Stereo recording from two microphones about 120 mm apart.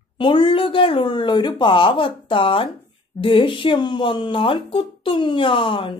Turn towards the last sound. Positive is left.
turn(degrees=45)  # may be behind; listen again after turning